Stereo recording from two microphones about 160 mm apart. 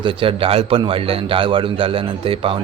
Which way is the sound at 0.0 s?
30° right (ahead or behind).